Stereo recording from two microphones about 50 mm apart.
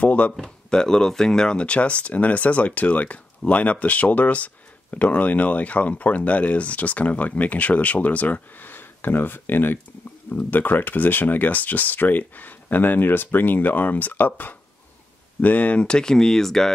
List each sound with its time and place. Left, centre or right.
0.0 s speech: left
0.4 s speech: centre; by 8.6 s left
8.6 s speech: left
15.9 s speech: centre